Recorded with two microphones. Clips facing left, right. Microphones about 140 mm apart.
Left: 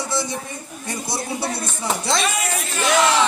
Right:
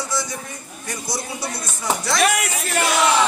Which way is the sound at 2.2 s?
75° right (ahead or behind).